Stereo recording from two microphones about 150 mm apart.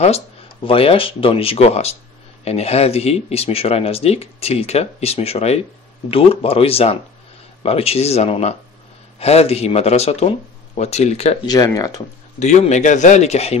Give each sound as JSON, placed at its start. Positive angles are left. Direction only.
{"t": 0.7, "sound": "speech", "side_deg": 40}
{"t": 11.4, "sound": "speech", "side_deg": 25}
{"t": 12.4, "sound": "speech", "side_deg": 50}